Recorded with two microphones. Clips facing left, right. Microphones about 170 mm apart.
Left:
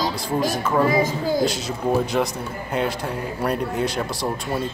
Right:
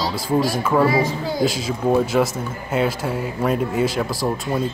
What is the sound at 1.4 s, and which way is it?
Speech, centre (ahead or behind).